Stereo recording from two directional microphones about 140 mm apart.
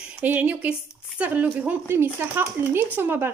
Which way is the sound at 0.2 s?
10° right (ahead or behind).